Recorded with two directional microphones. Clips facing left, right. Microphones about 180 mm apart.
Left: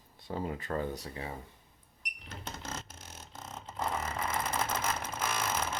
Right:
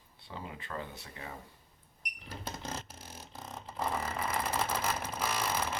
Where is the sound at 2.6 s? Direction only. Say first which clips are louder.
Right 1 dB; 10° right (ahead or behind).